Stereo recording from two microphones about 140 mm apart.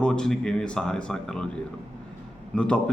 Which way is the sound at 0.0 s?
5° left (ahead or behind).